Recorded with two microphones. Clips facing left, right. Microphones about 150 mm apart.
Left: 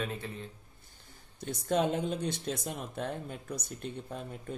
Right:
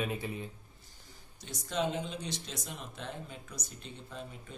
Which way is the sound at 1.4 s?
50° left (ahead or behind).